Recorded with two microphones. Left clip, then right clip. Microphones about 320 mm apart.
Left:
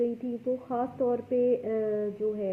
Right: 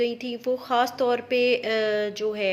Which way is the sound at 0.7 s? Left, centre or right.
Right.